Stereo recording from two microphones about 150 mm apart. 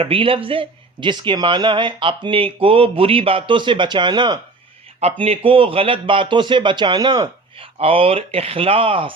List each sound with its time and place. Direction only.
0.0 s speech: 40° right (ahead or behind)
4.9 s speech: 40° right (ahead or behind)
7.8 s speech: 40° right (ahead or behind)